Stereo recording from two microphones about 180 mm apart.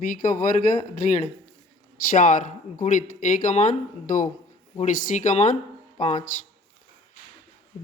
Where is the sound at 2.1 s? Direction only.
45° left (ahead or behind).